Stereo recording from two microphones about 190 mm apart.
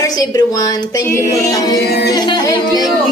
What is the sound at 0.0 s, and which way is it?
A woman's voice, 20° left (ahead or behind).